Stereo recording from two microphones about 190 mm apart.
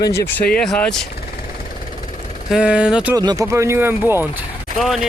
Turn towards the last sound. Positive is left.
turn(degrees=0)  # may be behind; listen again after turning